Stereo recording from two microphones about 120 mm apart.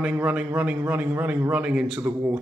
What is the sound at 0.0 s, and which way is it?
A man's voice, 10° right (ahead or behind).